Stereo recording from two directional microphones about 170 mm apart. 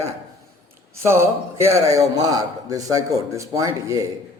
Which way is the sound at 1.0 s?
15° right (ahead or behind).